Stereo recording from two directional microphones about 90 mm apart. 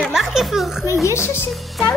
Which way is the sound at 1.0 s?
30° left (ahead or behind).